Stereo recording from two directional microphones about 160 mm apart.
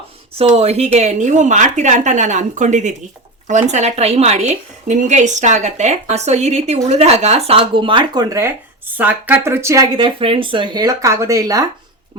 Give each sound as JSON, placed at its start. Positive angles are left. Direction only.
{"t": 0.3, "sound": "a woman's voice", "side_deg": -40}